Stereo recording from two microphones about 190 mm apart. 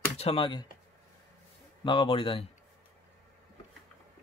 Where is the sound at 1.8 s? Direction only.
25° left (ahead or behind).